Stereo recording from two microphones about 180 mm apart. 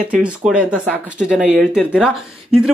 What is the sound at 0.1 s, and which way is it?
Speech, 5° right (ahead or behind).